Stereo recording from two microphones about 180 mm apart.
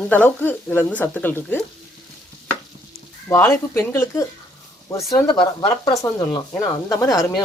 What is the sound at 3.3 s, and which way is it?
Speech, 15° left (ahead or behind).